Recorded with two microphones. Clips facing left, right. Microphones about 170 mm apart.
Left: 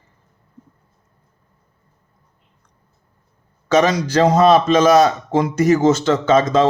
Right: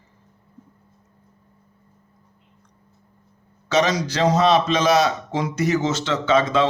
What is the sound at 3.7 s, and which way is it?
A man's voice, 50° left (ahead or behind).